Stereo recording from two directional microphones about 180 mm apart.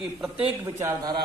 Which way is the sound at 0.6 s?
20° right (ahead or behind).